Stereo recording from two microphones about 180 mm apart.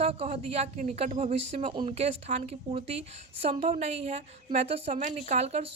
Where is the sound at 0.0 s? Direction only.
35° right (ahead or behind).